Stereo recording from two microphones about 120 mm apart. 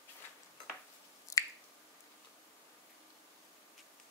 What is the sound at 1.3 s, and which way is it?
Finger snapping, 25° left (ahead or behind).